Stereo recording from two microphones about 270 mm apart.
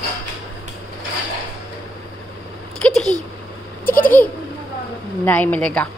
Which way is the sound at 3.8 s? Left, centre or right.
Left.